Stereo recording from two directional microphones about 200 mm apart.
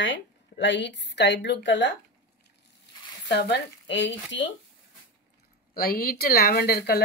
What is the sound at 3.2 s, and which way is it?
Speech, 55° left (ahead or behind).